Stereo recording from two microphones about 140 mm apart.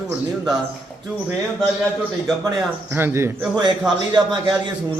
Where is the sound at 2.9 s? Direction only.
15° right (ahead or behind).